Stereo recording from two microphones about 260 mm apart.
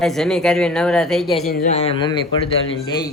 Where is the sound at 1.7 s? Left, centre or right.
Left.